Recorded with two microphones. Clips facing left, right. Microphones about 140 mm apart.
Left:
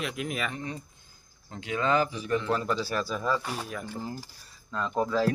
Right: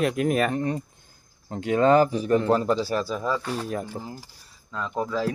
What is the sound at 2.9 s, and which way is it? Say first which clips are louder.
Speech: right 4 dB; 25° right (ahead or behind).